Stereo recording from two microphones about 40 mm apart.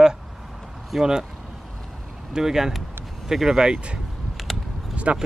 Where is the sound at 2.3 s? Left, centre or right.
Centre.